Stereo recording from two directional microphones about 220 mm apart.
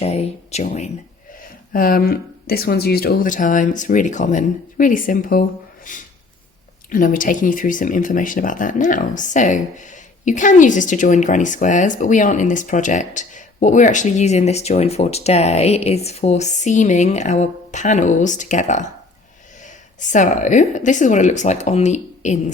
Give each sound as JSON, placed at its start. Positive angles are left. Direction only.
{"t": 0.0, "sound": "speech", "side_deg": 30}